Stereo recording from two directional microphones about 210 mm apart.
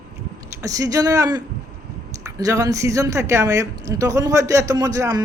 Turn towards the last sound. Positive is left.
turn(degrees=-15)  # may be behind; listen again after turning